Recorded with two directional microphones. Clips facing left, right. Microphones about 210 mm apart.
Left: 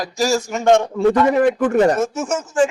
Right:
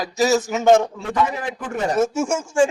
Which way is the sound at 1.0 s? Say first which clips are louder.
Left 9 dB; 60° left (ahead or behind).